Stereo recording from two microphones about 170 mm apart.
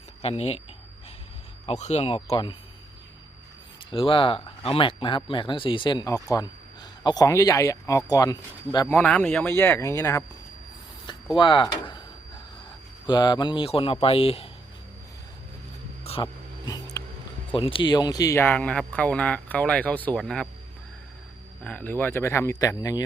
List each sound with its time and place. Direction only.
0.2 s speech: 40° left (ahead or behind)
1.6 s speech: 40° left (ahead or behind)
3.9 s speech: 30° left (ahead or behind)
8.9 s speech: 10° left (ahead or behind)
11.3 s speech: 30° left (ahead or behind)
13.1 s speech: 25° left (ahead or behind)
16.0 s dog: 35° left (ahead or behind)
16.6 s a sound: 20° left (ahead or behind)
17.5 s speech: 30° left (ahead or behind); by 20.5 s 5° left (ahead or behind)
21.6 s speech: 10° left (ahead or behind)